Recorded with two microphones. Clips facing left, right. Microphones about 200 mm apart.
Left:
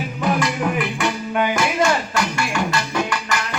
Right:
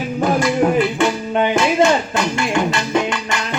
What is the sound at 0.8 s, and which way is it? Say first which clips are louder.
Music: right 6 dB; 25° right (ahead or behind).